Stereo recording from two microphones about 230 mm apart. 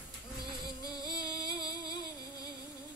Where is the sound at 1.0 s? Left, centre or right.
Centre.